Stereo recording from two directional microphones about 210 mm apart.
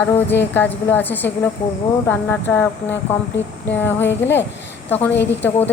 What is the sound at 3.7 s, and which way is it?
Speech, 10° left (ahead or behind).